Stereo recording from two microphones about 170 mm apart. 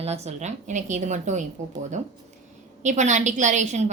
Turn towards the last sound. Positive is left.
turn(degrees=-45)  # may be behind; listen again after turning